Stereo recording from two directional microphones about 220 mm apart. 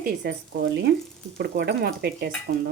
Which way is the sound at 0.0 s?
45° right (ahead or behind).